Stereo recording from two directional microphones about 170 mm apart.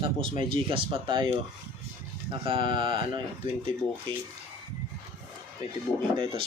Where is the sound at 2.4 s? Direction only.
30° right (ahead or behind).